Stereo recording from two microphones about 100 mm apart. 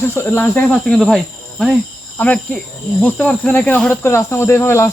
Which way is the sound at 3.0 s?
15° left (ahead or behind).